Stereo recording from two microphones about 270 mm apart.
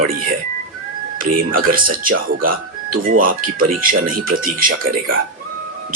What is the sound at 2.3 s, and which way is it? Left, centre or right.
Speech, right.